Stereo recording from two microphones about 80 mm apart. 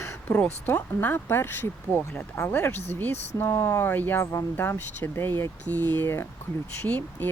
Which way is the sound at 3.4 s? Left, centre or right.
Left.